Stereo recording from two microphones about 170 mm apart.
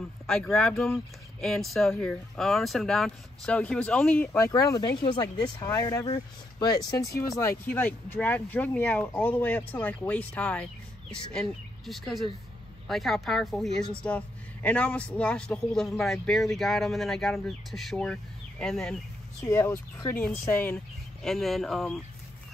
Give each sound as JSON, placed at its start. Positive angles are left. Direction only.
{"t": 0.3, "sound": "a man's voice", "side_deg": 5}
{"t": 4.5, "sound": "a man's voice", "side_deg": 20}
{"t": 19.4, "sound": "a man's voice", "side_deg": 15}